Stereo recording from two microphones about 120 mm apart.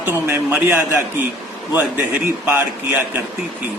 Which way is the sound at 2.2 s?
20° right (ahead or behind).